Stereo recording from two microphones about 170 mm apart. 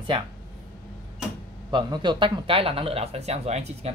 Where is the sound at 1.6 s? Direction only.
25° right (ahead or behind).